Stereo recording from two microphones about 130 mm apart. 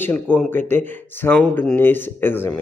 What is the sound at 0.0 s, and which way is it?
Speech, 10° left (ahead or behind).